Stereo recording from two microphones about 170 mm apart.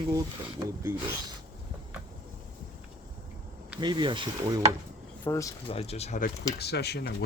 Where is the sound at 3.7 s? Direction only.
25° right (ahead or behind).